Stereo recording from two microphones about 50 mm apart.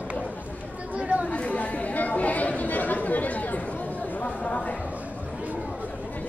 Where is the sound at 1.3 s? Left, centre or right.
Left.